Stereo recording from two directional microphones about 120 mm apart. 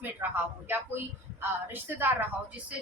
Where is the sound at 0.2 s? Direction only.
25° right (ahead or behind).